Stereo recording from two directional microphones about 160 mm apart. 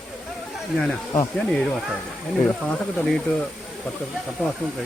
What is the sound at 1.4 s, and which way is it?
Speech, 5° left (ahead or behind).